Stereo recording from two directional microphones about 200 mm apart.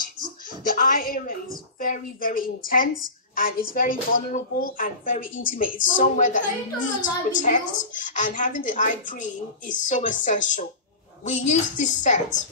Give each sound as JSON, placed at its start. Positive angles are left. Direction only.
{"t": 0.7, "sound": "a woman's voice", "side_deg": 45}